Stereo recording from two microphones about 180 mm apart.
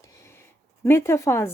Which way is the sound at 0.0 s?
15° left (ahead or behind).